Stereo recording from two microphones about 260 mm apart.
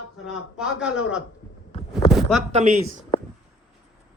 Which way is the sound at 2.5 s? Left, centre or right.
Right.